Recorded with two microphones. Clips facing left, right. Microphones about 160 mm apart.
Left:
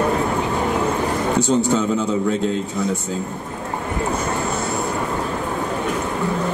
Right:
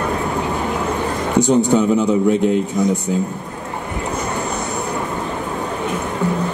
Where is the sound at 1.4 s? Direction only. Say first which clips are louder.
Right 6 dB; 15° right (ahead or behind).